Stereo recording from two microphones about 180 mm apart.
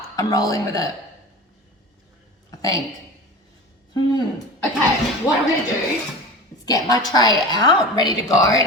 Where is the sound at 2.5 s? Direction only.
20° left (ahead or behind).